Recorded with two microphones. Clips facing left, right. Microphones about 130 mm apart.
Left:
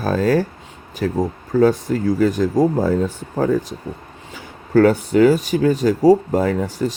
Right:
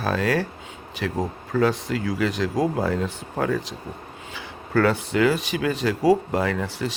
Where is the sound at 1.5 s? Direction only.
45° left (ahead or behind).